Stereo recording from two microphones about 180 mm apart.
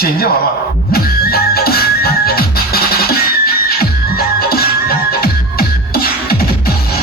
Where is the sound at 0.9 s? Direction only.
55° left (ahead or behind).